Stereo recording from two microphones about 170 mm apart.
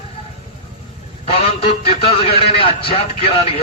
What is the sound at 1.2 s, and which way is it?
A man's voice, 35° left (ahead or behind).